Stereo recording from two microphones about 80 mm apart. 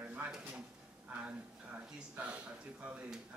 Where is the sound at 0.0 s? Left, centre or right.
Right.